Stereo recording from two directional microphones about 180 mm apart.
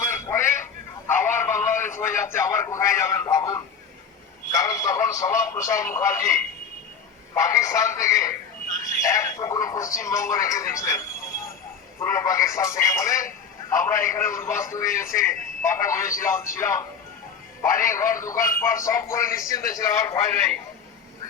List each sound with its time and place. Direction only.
0.0 s a sound: 15° left (ahead or behind)
4.5 s a man's voice: 20° left (ahead or behind)
11.9 s a man's voice: 15° left (ahead or behind)